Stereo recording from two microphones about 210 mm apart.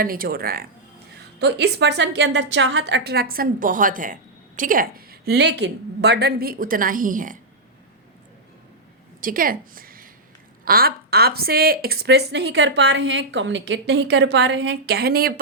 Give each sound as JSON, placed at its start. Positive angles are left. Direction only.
{"t": 0.0, "sound": "a woman's voice", "side_deg": -45}
{"t": 9.2, "sound": "a woman's voice", "side_deg": -40}